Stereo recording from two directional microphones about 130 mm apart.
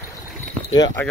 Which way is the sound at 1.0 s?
15° left (ahead or behind).